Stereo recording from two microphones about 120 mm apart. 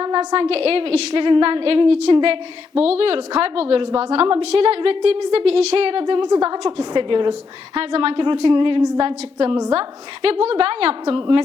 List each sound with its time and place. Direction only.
0.0 s a woman's voice: 40° right (ahead or behind)
7.8 s a woman's voice: 50° right (ahead or behind)